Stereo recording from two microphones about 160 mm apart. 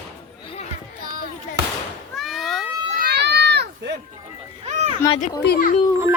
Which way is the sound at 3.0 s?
85° right.